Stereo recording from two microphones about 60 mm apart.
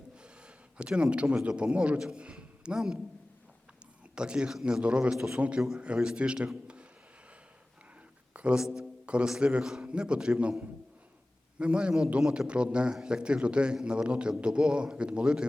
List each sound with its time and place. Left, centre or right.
0.8 s a man's voice: centre
4.1 s a man's voice: centre
8.3 s music: centre
8.6 s a man's voice: centre
11.6 s a man's voice: centre
12.5 s a man's voice: centre